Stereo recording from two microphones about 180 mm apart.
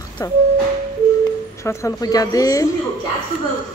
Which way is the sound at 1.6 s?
20° left (ahead or behind).